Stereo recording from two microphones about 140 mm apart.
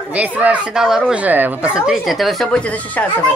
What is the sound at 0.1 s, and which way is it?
Speech, 10° right (ahead or behind).